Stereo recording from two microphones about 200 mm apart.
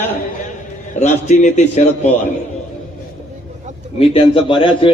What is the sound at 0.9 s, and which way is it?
Speech, 35° left (ahead or behind).